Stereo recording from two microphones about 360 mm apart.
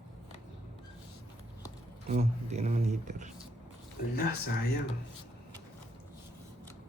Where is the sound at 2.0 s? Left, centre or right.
Centre.